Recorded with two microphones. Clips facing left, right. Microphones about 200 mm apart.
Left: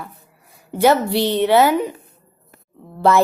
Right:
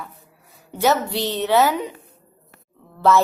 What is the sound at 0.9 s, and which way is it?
Speech, 60° left (ahead or behind).